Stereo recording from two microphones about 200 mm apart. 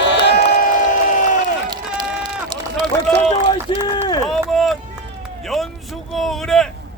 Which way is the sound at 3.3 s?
25° left (ahead or behind).